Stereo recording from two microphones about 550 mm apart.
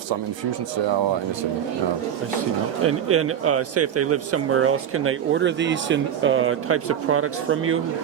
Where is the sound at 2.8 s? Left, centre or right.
Right.